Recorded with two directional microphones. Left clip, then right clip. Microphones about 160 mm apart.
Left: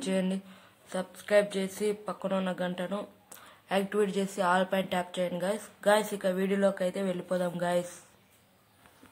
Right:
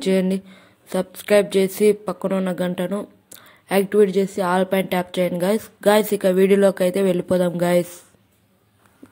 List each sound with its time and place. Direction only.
0.0 s a woman's voice: 35° right (ahead or behind)